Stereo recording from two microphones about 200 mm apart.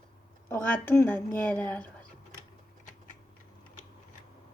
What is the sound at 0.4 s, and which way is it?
Speech, 10° left (ahead or behind).